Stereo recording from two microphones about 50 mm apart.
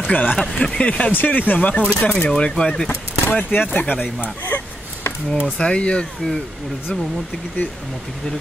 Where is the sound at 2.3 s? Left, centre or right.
Centre.